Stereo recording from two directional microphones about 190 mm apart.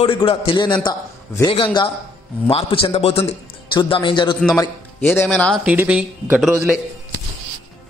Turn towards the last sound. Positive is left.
turn(degrees=0)  # may be behind; listen again after turning